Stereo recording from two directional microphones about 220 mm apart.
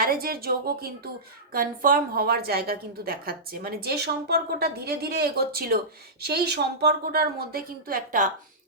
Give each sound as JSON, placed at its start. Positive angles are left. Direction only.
{"t": 0.0, "sound": "a woman's voice", "side_deg": -40}